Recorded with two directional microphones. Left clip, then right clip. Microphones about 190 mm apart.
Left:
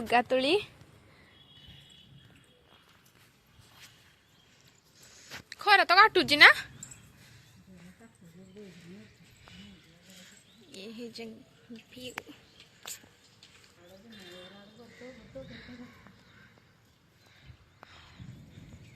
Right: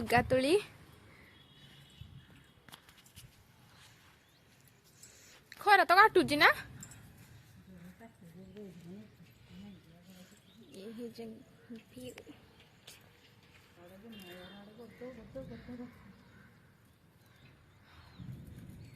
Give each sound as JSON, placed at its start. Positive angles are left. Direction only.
{"t": 0.1, "sound": "speech", "side_deg": -5}
{"t": 5.5, "sound": "speech", "side_deg": -10}
{"t": 10.8, "sound": "a woman's voice", "side_deg": 5}